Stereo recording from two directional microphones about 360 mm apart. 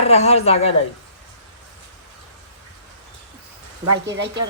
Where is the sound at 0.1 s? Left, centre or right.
Centre.